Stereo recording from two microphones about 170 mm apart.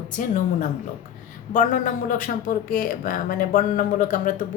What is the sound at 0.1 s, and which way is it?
Speech, 50° left (ahead or behind).